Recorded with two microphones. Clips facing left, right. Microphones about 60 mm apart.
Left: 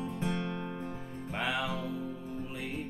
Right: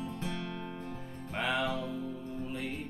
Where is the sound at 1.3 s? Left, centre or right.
Centre.